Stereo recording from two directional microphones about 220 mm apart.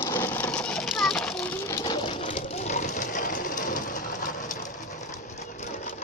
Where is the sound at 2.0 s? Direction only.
25° left (ahead or behind).